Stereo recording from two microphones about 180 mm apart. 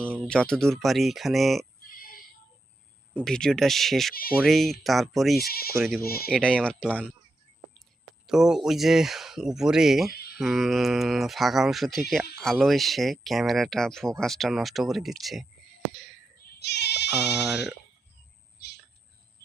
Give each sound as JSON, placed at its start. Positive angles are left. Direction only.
{"t": 0.0, "sound": "speech", "side_deg": 5}
{"t": 1.9, "sound": "female singing", "side_deg": 55}
{"t": 3.2, "sound": "speech", "side_deg": 5}
{"t": 4.1, "sound": "speech", "side_deg": 55}
{"t": 4.4, "sound": "speech", "side_deg": 0}
{"t": 5.4, "sound": "speech", "side_deg": 55}
{"t": 6.3, "sound": "speech", "side_deg": 5}
{"t": 8.3, "sound": "speech", "side_deg": 0}
{"t": 10.1, "sound": "a sound", "side_deg": 60}
{"t": 10.3, "sound": "speech", "side_deg": 0}
{"t": 16.6, "sound": "sheep", "side_deg": 65}